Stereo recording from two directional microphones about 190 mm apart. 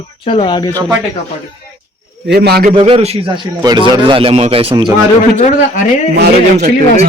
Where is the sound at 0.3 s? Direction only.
25° left (ahead or behind).